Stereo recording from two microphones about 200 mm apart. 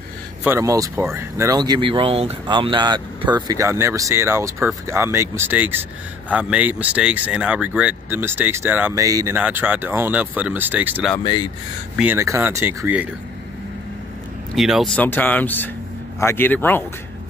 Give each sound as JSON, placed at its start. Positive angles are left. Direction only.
{"t": 0.4, "sound": "a man's voice", "side_deg": -15}
{"t": 14.5, "sound": "speech", "side_deg": 0}